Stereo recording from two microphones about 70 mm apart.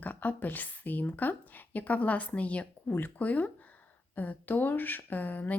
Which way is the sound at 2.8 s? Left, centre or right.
Left.